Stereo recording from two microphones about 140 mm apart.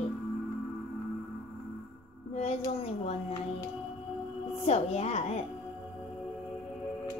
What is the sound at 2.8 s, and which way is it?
Speech, 45° left (ahead or behind).